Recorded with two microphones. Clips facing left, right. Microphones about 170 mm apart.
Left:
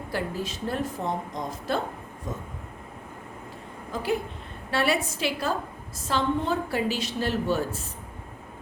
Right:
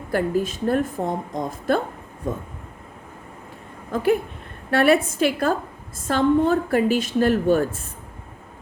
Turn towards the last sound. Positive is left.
turn(degrees=-50)  # may be behind; listen again after turning